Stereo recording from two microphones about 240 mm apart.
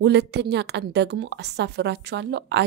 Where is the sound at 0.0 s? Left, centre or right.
Right.